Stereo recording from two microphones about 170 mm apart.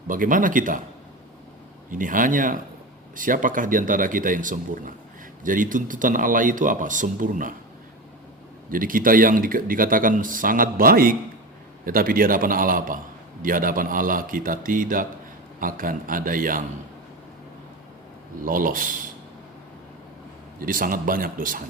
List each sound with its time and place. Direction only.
0.1 s speech: 55° right (ahead or behind)
1.9 s speech: 50° right (ahead or behind)
8.7 s speech: 55° right (ahead or behind)
18.4 s speech: 55° right (ahead or behind)
20.6 s speech: 55° right (ahead or behind)